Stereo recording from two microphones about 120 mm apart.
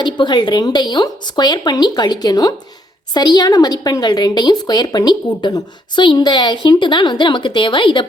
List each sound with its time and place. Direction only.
0.0 s a woman's voice: 40° left (ahead or behind)